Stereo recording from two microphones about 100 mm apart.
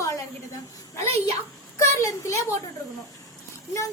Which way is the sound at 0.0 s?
35° left (ahead or behind).